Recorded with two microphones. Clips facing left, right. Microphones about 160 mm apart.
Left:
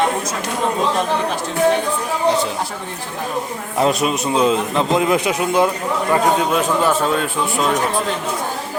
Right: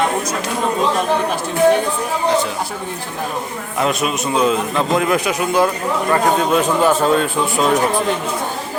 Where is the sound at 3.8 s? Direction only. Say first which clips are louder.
Left 2 dB; 35° left (ahead or behind).